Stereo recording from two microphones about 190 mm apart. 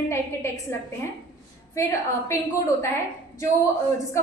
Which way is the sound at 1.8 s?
15° left (ahead or behind).